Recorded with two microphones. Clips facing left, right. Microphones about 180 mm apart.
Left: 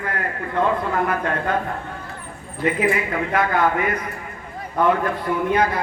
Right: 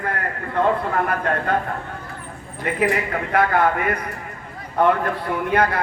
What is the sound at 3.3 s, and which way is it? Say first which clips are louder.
Speech: right 2 dB; 60° right (ahead or behind).